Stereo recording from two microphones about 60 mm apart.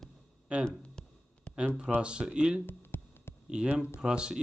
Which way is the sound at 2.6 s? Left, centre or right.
Left.